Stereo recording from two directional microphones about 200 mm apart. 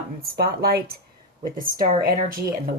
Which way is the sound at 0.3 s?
50° right (ahead or behind).